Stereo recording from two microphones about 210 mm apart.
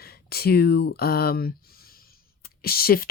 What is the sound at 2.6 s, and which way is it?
Speech, 45° left (ahead or behind).